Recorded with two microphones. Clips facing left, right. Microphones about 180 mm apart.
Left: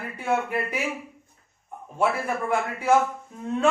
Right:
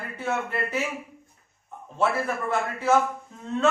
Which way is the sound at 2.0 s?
10° left (ahead or behind).